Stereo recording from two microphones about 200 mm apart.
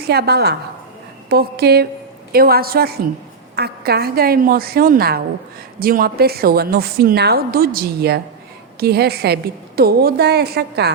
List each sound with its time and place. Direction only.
0.1 s a woman's voice: 55° right (ahead or behind)